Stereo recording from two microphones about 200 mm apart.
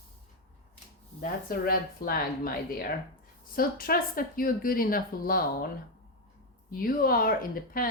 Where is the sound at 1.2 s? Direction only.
45° left (ahead or behind).